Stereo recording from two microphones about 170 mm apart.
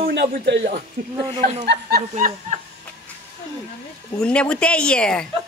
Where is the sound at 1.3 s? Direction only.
45° right (ahead or behind).